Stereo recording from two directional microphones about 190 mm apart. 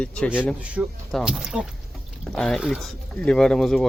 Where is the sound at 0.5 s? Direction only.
5° right (ahead or behind).